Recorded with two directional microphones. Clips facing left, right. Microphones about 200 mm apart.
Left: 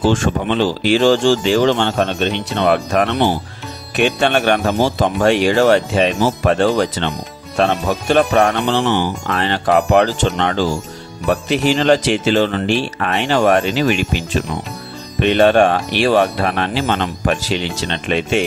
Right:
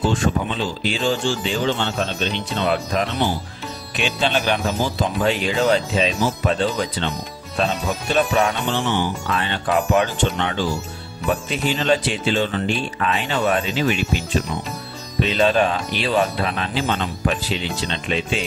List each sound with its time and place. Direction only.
0.0 s speech: 90° left; by 10.0 s 65° left (ahead or behind)
10.3 s speech: 90° left
11.2 s speech: 75° left (ahead or behind)
15.1 s speech: 65° left (ahead or behind)